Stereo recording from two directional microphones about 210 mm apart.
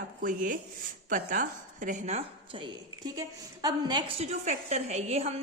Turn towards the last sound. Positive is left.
turn(degrees=-30)  # may be behind; listen again after turning